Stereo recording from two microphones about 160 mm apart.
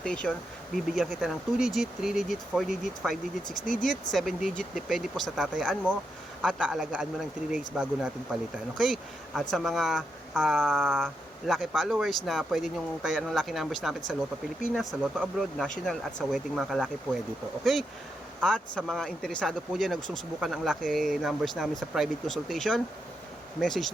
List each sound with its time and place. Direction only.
0.0 s speech: 5° left (ahead or behind)
3.7 s speech: 55° left (ahead or behind)
4.1 s speech: centre (ahead or behind)